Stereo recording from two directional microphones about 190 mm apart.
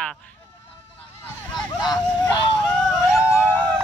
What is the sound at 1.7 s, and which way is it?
Vehicle, 20° left (ahead or behind).